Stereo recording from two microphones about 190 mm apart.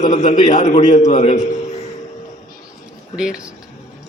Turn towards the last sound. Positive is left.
turn(degrees=-5)  # may be behind; listen again after turning